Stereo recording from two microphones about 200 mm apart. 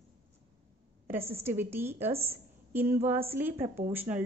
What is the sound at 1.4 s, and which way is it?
A woman's voice, 10° right (ahead or behind).